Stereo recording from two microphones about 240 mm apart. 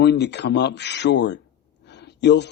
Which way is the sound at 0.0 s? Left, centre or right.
Left.